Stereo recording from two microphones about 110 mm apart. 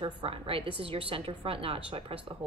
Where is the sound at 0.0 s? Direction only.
55° right (ahead or behind).